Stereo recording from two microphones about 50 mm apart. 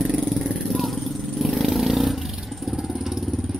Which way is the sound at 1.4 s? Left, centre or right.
Centre.